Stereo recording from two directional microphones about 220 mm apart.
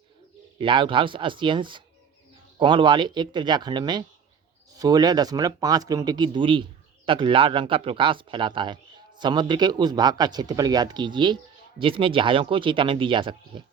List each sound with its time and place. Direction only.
0.6 s speech: 20° right (ahead or behind)